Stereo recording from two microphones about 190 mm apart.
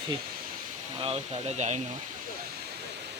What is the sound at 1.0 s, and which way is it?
Speech, 30° right (ahead or behind).